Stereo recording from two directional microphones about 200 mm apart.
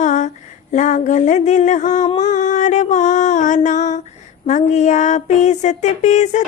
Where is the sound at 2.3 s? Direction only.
40° left (ahead or behind).